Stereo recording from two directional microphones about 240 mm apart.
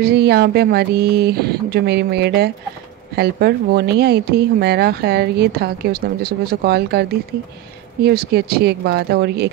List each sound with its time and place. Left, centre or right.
0.0 s speech: right